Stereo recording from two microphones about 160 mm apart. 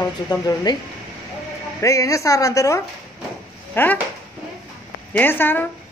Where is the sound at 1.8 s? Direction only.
20° left (ahead or behind).